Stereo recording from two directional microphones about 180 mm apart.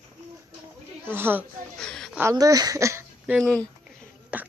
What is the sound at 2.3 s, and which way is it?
Speech, 20° right (ahead or behind).